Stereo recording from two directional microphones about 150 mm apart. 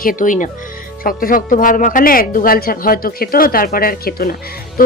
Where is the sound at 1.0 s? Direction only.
70° left (ahead or behind).